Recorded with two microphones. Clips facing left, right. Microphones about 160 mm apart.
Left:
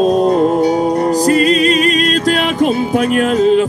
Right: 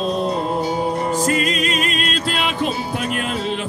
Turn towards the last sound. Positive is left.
turn(degrees=45)  # may be behind; listen again after turning